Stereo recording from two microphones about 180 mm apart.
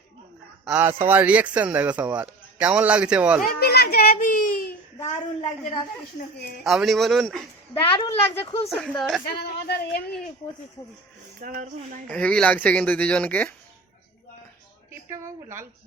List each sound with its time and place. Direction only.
0.6 s speech: 10° right (ahead or behind)
3.4 s a child's voice: 60° left (ahead or behind)
6.7 s a man's voice: centre (ahead or behind)
7.7 s a child's voice: 25° left (ahead or behind)
8.8 s a man's voice: centre (ahead or behind)
9.2 s a child's voice: 65° left (ahead or behind)
11.3 s speech: 50° right (ahead or behind)
12.0 s speech: 5° left (ahead or behind)
15.1 s speech: 15° right (ahead or behind)